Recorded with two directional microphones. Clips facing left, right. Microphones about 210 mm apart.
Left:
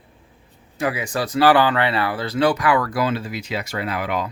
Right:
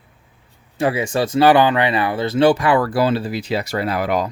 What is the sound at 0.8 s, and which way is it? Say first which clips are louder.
Speech: right 5 dB; 30° right (ahead or behind).